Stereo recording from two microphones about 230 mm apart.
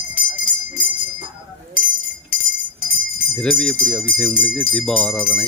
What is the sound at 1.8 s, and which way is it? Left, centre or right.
Chink, left.